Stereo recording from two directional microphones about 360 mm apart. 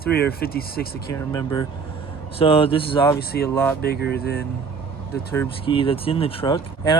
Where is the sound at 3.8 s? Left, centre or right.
Left.